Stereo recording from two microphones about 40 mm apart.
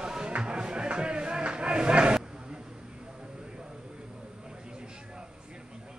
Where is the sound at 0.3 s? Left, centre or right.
Right.